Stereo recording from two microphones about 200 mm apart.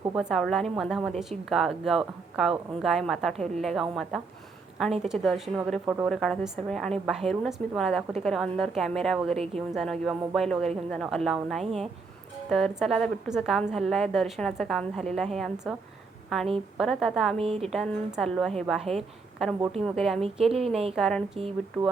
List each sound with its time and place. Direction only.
0.2 s a woman's voice: centre (ahead or behind)
5.8 s speech: 10° right (ahead or behind)
6.1 s a woman's voice: centre (ahead or behind)
17.3 s a woman's voice: 30° right (ahead or behind)
17.6 s a woman's voice: centre (ahead or behind)